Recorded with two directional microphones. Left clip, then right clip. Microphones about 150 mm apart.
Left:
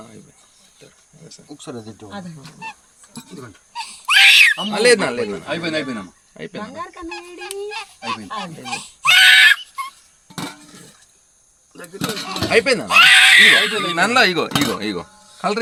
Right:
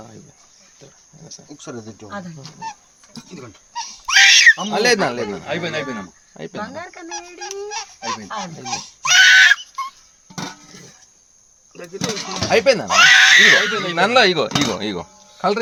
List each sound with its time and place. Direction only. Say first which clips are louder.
1.5 s speech: left 1 dB; 25° right (ahead or behind)
2.0 s speech: right 2 dB; 10° left (ahead or behind)
3.7 s wail: left 2 dB; 5° left (ahead or behind)
4.7 s speech: left 2 dB; 90° right
6.9 s fowl: even; 10° left (ahead or behind)
11.9 s speech: even; 25° right (ahead or behind)
12.5 s speech: right 1 dB; 85° right
12.9 s speech: left 1 dB; 5° left (ahead or behind)
13.7 s speech: right 1 dB; 55° right (ahead or behind)